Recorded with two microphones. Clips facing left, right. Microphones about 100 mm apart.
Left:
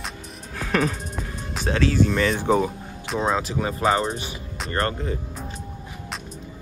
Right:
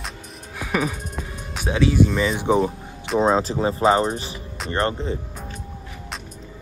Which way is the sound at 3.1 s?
30° right (ahead or behind).